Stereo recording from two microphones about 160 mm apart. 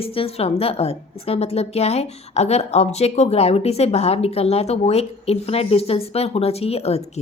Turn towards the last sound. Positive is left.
turn(degrees=40)  # may be behind; listen again after turning